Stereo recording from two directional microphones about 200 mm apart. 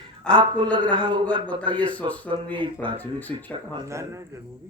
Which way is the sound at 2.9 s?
10° left (ahead or behind).